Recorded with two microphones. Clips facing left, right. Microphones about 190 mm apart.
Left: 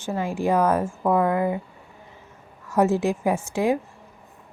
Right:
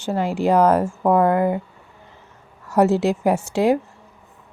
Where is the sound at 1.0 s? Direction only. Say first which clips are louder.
Right 4 dB; 50° right (ahead or behind).